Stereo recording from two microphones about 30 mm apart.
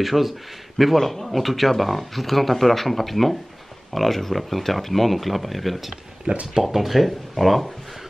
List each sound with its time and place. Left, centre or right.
0.0 s speech: centre
0.9 s speech: centre
6.3 s speech: right
6.6 s speech: centre